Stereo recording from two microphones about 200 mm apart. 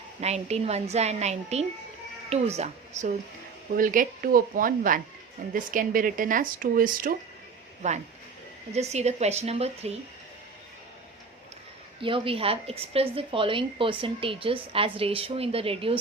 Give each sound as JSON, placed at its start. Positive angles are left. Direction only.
{"t": 0.2, "sound": "a woman's voice", "side_deg": -35}
{"t": 12.0, "sound": "a woman's voice", "side_deg": -25}